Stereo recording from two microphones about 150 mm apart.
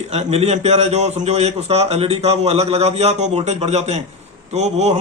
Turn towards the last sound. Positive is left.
turn(degrees=-45)  # may be behind; listen again after turning